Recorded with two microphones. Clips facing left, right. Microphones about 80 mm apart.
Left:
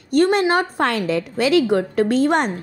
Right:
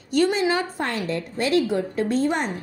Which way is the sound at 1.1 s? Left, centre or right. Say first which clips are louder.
Left 5 dB; left.